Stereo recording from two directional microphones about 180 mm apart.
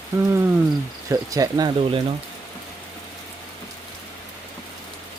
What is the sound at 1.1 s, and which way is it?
Speech, 20° right (ahead or behind).